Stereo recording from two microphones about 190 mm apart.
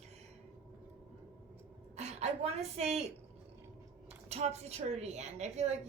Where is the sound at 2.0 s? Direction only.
35° right (ahead or behind).